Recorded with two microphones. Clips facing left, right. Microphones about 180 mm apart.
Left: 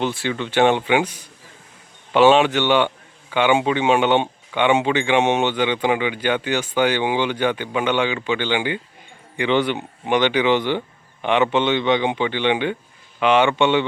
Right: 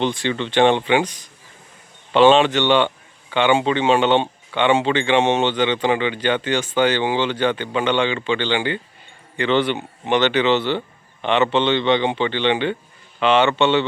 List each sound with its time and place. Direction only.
0.0 s a man's voice: 5° left (ahead or behind)